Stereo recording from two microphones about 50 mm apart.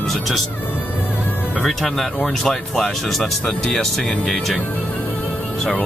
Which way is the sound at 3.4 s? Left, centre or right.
Centre.